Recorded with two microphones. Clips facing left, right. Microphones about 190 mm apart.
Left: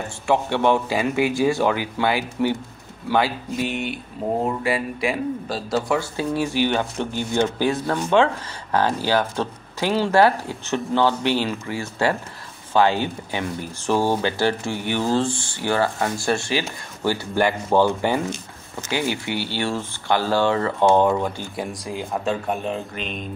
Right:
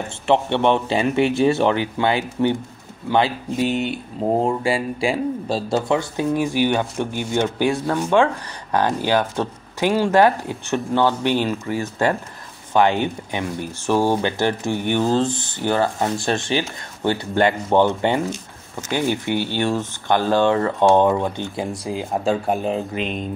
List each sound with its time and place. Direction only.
0.3 s speech: 20° right (ahead or behind)
12.7 s speech: 20° right (ahead or behind)
18.9 s speech: 10° left (ahead or behind)
19.3 s speech: 20° right (ahead or behind)
22.2 s speech: 35° right (ahead or behind)